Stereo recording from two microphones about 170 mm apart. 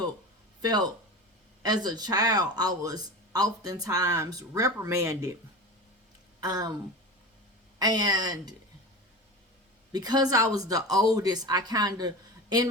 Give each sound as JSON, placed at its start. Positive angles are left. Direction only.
{"t": 0.6, "sound": "speech", "side_deg": -25}
{"t": 6.4, "sound": "speech", "side_deg": -25}
{"t": 7.8, "sound": "speech", "side_deg": -25}
{"t": 9.9, "sound": "speech", "side_deg": -25}